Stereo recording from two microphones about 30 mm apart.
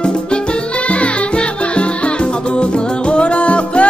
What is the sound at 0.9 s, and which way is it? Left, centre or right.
Music, left.